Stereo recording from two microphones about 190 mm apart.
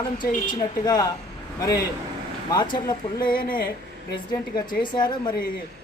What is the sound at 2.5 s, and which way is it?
Speech, 25° left (ahead or behind).